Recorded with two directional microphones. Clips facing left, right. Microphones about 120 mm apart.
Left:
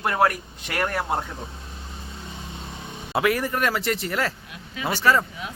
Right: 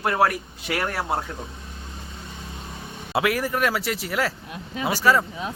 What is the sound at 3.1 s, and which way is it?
Speech, 5° right (ahead or behind).